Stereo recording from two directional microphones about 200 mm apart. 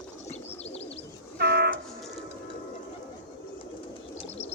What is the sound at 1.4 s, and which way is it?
Train, 55° right (ahead or behind).